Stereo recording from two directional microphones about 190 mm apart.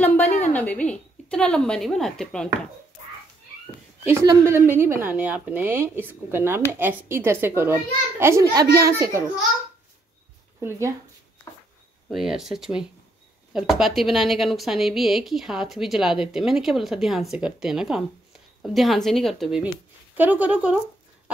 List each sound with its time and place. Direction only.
0.0 s a sound: 10° left (ahead or behind)
0.5 s a woman's voice: 10° left (ahead or behind)
4.0 s speech: 15° right (ahead or behind)
12.1 s a woman's voice: centre (ahead or behind)